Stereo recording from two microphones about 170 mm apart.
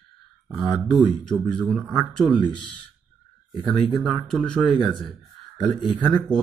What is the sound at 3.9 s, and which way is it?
Speech, centre (ahead or behind).